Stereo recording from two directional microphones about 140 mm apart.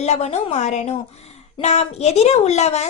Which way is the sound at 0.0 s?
50° left (ahead or behind).